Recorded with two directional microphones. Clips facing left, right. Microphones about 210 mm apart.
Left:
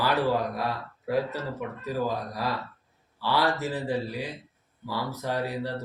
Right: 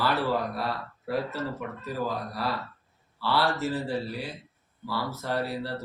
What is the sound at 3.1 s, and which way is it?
Speech, 15° left (ahead or behind).